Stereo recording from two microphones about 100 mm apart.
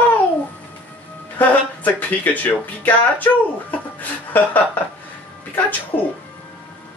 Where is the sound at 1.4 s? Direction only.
15° left (ahead or behind).